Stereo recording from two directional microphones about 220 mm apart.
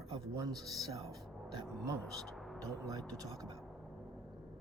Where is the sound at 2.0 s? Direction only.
Centre (ahead or behind).